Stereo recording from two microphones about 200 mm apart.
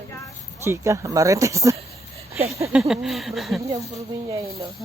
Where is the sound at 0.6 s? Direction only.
15° right (ahead or behind).